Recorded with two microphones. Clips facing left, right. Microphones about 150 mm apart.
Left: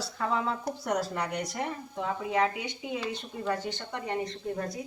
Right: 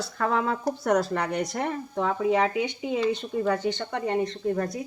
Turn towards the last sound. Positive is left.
turn(degrees=-70)  # may be behind; listen again after turning